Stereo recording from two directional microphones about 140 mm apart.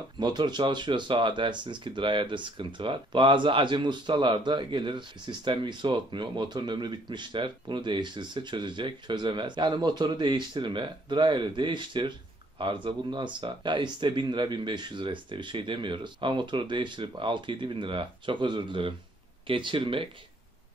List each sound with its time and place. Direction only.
0.2 s speech: 30° right (ahead or behind)